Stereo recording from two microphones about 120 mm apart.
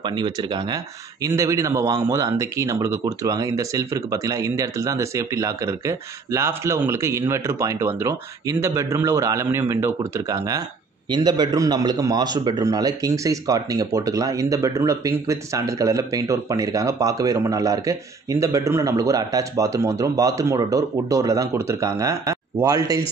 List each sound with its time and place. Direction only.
0.0 s speech: 40° right (ahead or behind)
1.2 s a man's voice: 30° right (ahead or behind)